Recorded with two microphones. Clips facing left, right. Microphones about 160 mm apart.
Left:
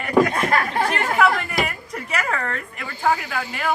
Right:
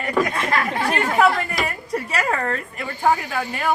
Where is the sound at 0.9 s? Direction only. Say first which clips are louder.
Right 3 dB; 25° right (ahead or behind).